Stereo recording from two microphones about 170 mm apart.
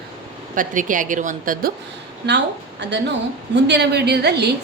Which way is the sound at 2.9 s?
90° right.